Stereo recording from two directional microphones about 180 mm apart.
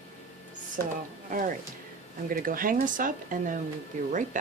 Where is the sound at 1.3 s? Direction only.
50° right (ahead or behind).